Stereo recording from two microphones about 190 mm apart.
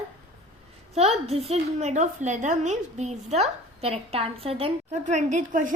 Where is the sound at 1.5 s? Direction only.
35° right (ahead or behind).